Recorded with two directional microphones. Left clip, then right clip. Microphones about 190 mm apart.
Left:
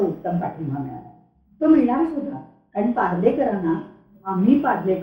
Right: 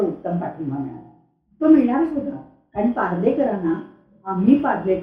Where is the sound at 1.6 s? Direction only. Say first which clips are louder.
Right 1 dB; 15° right (ahead or behind).